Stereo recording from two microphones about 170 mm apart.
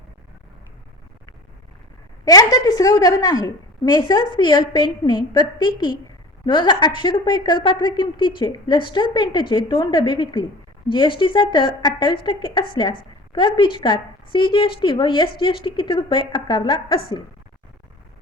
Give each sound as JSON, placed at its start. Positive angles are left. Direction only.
{"t": 2.2, "sound": "speech", "side_deg": 20}